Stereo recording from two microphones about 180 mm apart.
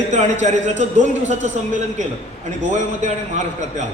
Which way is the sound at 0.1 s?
40° right (ahead or behind).